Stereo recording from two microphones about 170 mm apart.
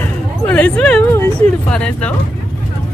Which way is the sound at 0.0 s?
10° left (ahead or behind).